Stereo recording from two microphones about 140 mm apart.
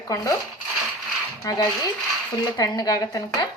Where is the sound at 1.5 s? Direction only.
25° left (ahead or behind).